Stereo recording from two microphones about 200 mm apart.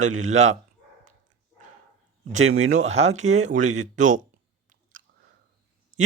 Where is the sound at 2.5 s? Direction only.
35° right (ahead or behind).